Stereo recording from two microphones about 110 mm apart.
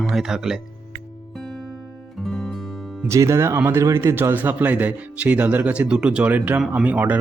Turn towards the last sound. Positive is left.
turn(degrees=-15)  # may be behind; listen again after turning